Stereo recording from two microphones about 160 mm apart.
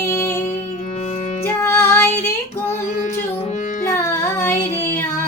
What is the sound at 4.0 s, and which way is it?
Music, 15° left (ahead or behind).